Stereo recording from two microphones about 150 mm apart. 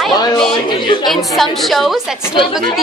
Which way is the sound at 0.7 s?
30° left (ahead or behind).